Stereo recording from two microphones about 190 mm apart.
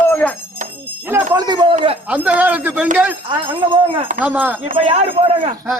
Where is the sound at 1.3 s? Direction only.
20° right (ahead or behind).